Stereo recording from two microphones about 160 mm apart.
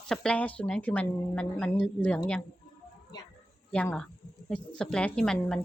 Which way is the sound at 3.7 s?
5° left (ahead or behind).